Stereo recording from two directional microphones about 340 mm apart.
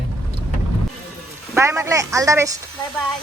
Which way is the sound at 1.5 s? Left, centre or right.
Centre.